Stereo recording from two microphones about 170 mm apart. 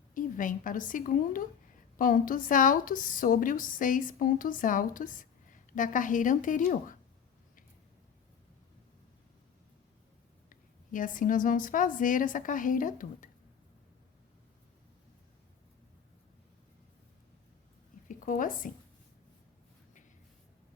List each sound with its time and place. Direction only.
0.1 s a woman's voice: 50° left (ahead or behind)
10.5 s a woman's voice: 50° left (ahead or behind)
18.1 s a woman's voice: 50° left (ahead or behind)